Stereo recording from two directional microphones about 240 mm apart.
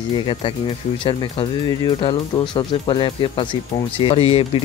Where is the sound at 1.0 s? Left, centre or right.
Centre.